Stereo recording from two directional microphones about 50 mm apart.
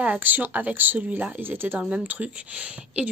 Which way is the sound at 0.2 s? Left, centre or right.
Right.